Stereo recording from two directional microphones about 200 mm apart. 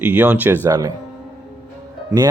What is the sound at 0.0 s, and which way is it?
Speech, 5° right (ahead or behind).